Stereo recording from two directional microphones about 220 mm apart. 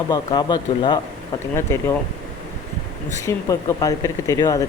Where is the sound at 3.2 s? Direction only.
15° left (ahead or behind).